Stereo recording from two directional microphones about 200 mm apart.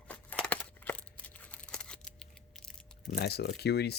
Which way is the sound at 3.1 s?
55° left (ahead or behind).